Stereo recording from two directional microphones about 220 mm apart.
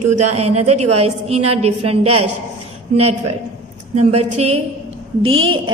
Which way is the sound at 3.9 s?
30° right (ahead or behind).